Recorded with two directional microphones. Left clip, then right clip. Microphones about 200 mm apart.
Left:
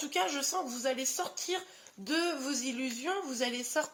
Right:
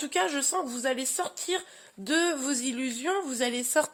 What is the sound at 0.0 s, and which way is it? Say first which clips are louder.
Speech: right 4 dB; 55° right (ahead or behind).